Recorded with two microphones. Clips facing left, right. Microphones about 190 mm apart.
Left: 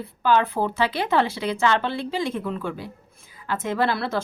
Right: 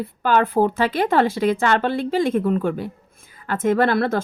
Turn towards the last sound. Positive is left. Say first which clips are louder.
# right 5 dB
turn(degrees=-50)  # may be behind; listen again after turning